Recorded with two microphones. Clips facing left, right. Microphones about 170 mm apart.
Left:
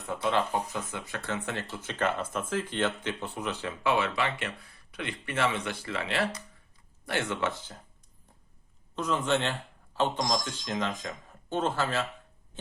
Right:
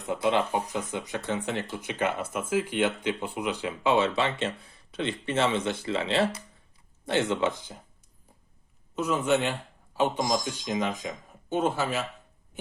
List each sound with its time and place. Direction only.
0.1 s speech: 20° right (ahead or behind)
9.0 s speech: 10° right (ahead or behind)